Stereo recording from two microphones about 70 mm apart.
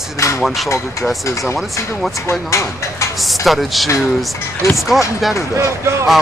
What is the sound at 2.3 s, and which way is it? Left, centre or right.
Speech, left.